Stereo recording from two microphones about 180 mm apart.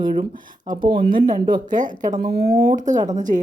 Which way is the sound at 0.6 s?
25° right (ahead or behind).